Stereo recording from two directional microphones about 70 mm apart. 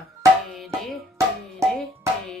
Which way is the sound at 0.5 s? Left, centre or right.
Centre.